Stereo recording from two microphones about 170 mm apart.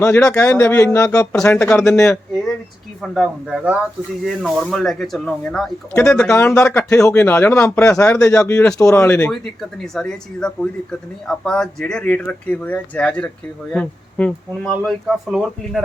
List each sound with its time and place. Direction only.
0.0 s speech: 10° left (ahead or behind)
1.4 s speech: 5° left (ahead or behind)